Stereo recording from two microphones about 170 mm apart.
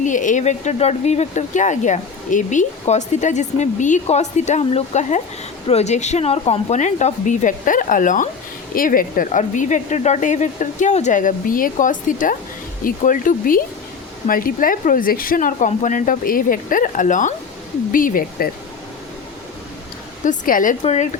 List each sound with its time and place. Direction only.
0.0 s speech: 50° left (ahead or behind)
20.2 s speech: 50° left (ahead or behind)
20.8 s speech: 40° left (ahead or behind)